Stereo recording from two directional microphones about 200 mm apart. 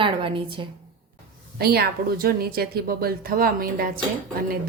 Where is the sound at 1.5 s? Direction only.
50° right (ahead or behind).